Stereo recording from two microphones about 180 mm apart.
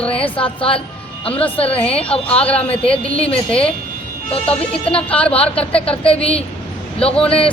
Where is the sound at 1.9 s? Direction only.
5° left (ahead or behind).